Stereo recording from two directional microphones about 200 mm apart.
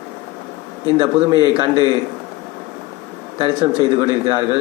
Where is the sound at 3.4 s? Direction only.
25° right (ahead or behind).